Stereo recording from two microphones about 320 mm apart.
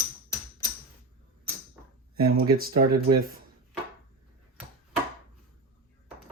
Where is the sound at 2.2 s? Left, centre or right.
Right.